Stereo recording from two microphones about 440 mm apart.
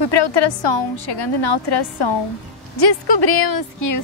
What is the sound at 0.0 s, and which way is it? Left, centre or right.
A woman's voice, left.